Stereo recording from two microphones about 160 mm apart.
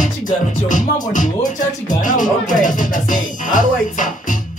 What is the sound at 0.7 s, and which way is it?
Music, 55° left (ahead or behind).